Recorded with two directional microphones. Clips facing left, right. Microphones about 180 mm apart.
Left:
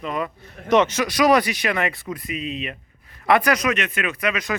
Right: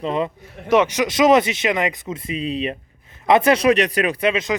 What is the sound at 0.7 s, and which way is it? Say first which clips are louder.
Speech: right 1 dB; 10° right (ahead or behind).